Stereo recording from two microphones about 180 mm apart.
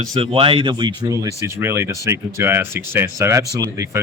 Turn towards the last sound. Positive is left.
turn(degrees=-15)  # may be behind; listen again after turning